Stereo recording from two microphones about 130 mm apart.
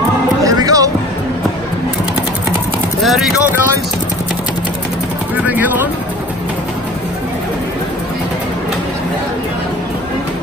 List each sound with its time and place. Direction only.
0.4 s music: 25° right (ahead or behind)
3.0 s speech: centre (ahead or behind)